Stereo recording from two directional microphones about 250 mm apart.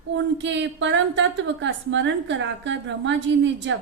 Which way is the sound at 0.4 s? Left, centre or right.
Right.